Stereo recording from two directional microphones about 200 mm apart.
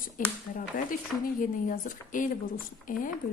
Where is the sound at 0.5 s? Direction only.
45° left (ahead or behind).